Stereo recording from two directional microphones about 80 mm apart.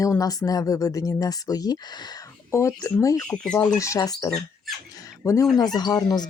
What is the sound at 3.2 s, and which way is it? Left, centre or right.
Speech, centre.